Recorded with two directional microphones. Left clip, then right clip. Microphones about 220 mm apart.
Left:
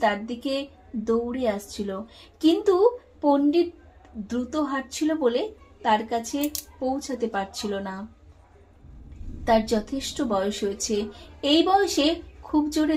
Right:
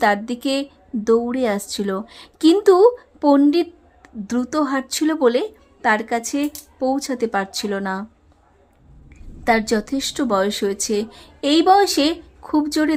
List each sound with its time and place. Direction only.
0.3 s a woman's voice: 35° right (ahead or behind)
9.5 s a woman's voice: 30° right (ahead or behind)